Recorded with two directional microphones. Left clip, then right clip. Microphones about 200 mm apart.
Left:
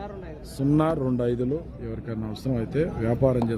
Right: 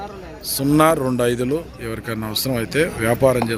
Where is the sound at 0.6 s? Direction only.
10° right (ahead or behind).